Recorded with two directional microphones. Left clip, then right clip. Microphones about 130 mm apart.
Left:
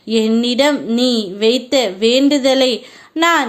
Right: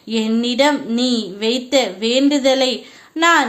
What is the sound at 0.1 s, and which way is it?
A woman's voice, 35° left (ahead or behind).